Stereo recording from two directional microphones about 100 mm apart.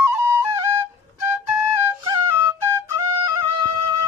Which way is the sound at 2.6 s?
25° right (ahead or behind).